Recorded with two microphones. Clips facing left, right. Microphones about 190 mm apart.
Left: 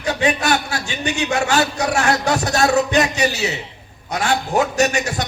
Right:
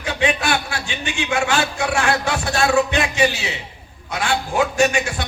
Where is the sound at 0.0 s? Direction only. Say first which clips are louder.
Left 2 dB; 40° left (ahead or behind).